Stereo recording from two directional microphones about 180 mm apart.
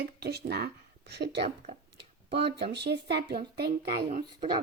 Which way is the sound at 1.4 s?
40° right (ahead or behind).